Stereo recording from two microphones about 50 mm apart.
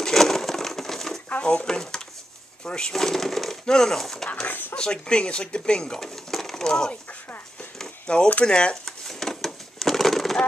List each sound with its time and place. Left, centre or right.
0.0 s crushing: centre
1.4 s speech: left
2.9 s speech: centre
4.5 s speech: left
4.7 s speech: centre
8.1 s speech: left
9.0 s a sound: centre